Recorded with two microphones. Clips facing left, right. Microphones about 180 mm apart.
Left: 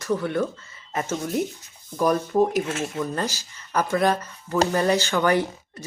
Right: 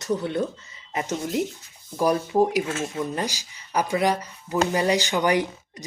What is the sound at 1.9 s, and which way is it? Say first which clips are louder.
Speech: even; 10° right (ahead or behind).